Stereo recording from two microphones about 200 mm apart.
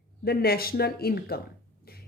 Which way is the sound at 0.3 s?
50° left (ahead or behind).